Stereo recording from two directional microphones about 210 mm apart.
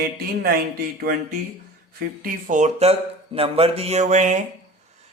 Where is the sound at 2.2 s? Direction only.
35° right (ahead or behind).